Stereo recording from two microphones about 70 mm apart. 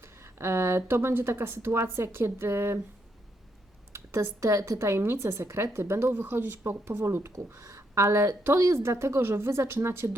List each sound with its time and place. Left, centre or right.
0.0 s speech: right
3.9 s a woman's voice: right
7.3 s a woman's voice: right